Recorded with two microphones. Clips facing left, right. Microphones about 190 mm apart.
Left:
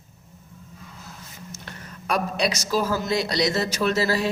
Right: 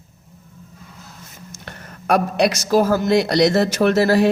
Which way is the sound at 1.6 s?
55° right (ahead or behind).